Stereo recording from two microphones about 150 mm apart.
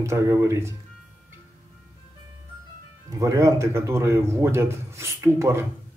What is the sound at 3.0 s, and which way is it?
Speech, 25° right (ahead or behind).